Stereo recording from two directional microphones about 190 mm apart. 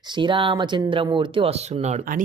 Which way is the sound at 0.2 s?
25° right (ahead or behind).